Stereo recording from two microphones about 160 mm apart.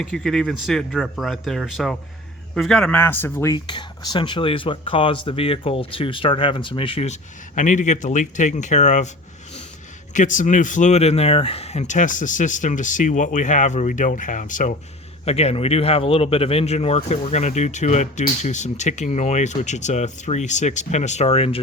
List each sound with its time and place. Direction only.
0.0 s a man's voice: 5° left (ahead or behind)
3.5 s speech: 25° left (ahead or behind); by 9.0 s 50° left (ahead or behind)
10.2 s speech: 50° left (ahead or behind)
15.2 s speech: 40° left (ahead or behind)